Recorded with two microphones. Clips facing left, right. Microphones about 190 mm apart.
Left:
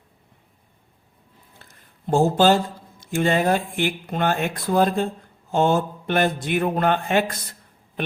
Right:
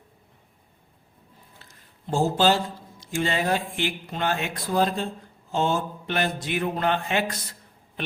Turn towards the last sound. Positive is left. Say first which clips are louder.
# left 4 dB
turn(degrees=50)  # may be behind; listen again after turning